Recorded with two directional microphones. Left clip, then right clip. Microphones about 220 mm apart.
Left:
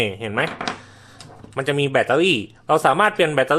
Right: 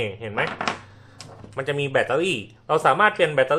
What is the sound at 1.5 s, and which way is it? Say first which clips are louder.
Speech: left 3 dB; 45° left (ahead or behind).